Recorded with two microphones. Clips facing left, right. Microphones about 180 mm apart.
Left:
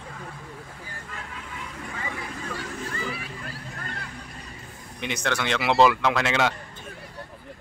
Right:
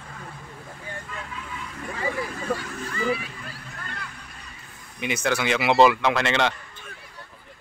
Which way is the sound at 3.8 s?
40° left (ahead or behind).